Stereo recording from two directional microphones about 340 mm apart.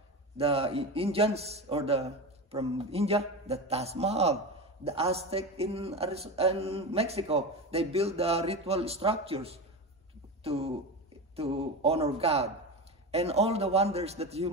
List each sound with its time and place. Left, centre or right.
0.4 s a man's voice: centre